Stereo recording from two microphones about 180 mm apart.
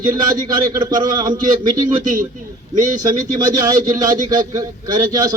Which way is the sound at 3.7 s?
20° right (ahead or behind).